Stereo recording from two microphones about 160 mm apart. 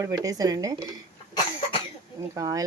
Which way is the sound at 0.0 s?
20° right (ahead or behind).